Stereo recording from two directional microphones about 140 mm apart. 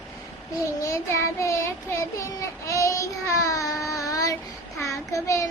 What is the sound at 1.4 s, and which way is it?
Child singing, 20° left (ahead or behind).